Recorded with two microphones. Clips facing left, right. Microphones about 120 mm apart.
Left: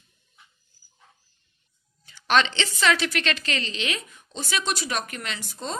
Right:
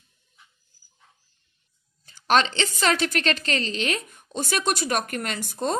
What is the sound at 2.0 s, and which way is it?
A woman's voice, 45° right (ahead or behind).